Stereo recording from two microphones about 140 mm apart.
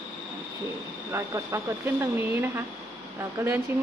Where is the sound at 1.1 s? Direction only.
20° right (ahead or behind).